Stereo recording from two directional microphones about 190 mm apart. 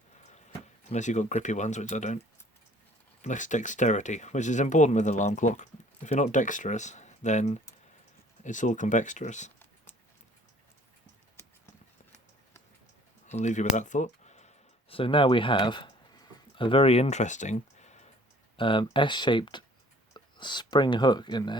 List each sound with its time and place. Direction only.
0.9 s speech: 40° left (ahead or behind)
13.3 s speech: 40° left (ahead or behind)
18.5 s speech: 25° left (ahead or behind)